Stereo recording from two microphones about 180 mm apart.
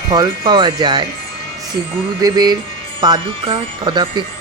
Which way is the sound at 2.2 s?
20° right (ahead or behind).